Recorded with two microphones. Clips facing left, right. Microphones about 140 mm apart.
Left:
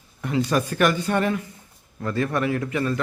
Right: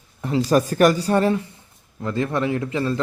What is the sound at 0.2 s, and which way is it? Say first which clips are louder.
A man's voice: right 4 dB; 30° right (ahead or behind).